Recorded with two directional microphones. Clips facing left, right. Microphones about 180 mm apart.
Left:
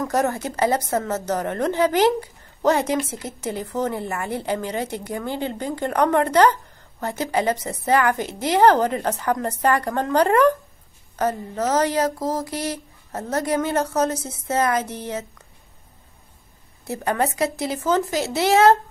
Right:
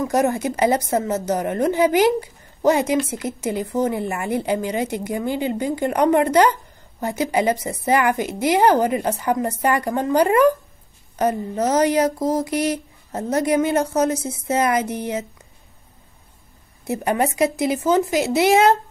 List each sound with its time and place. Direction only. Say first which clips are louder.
0.0 s a woman's voice: right 3 dB; 15° right (ahead or behind)
16.8 s a woman's voice: right 2 dB; 15° right (ahead or behind)